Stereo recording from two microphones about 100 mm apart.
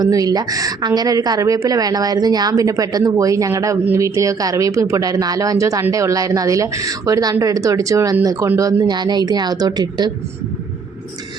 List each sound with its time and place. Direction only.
0.0 s a woman's voice: 40° right (ahead or behind)